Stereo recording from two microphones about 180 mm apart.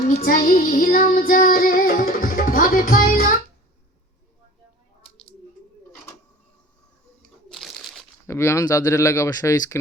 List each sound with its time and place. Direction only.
0.3 s music: 50° left (ahead or behind)
7.2 s crumpling: centre (ahead or behind)
8.3 s speech: 15° left (ahead or behind)